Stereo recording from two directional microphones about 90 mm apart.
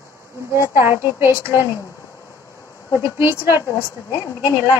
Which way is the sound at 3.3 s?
40° left (ahead or behind).